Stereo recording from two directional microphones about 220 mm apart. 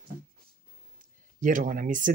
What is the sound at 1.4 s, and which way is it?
Speech, 35° right (ahead or behind).